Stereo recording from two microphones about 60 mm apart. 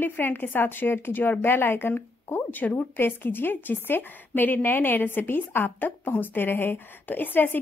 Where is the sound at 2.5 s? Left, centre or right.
Left.